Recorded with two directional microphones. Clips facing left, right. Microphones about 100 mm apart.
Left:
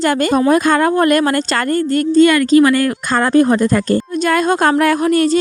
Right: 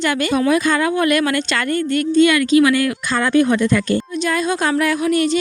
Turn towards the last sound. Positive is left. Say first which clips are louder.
# left 4 dB
turn(degrees=45)  # may be behind; listen again after turning